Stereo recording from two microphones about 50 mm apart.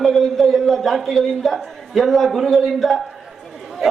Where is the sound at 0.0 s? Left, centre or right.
Centre.